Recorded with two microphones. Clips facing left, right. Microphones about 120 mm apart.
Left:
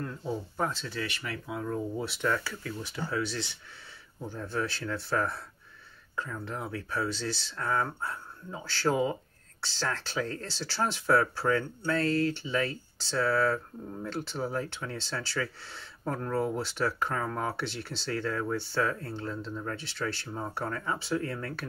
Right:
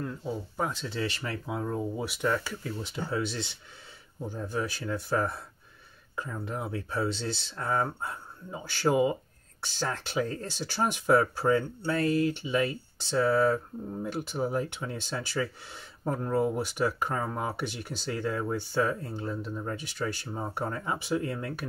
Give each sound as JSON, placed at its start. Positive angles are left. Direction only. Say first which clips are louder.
{"t": 0.0, "sound": "speech", "louder": "even", "side_deg": -5}
{"t": 2.0, "sound": "speech", "louder": "right 1 dB", "side_deg": -15}
{"t": 2.6, "sound": "speech", "louder": "right 1 dB", "side_deg": -25}